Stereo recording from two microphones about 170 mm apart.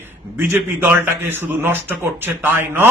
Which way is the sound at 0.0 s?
10° right (ahead or behind).